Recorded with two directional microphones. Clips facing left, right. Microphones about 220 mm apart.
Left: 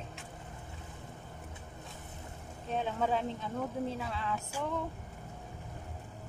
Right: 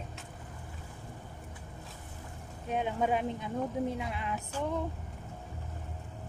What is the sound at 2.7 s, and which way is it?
A woman's voice, 15° right (ahead or behind).